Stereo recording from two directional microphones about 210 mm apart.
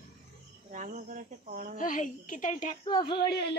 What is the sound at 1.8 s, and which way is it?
A woman's voice, 40° left (ahead or behind).